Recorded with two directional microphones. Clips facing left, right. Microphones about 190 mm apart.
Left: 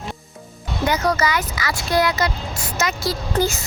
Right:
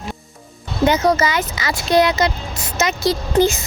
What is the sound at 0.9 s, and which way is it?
Speech, 20° right (ahead or behind).